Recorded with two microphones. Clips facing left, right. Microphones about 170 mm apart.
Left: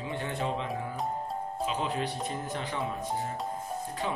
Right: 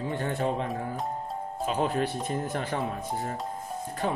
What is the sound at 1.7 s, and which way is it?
Speech, 50° right (ahead or behind).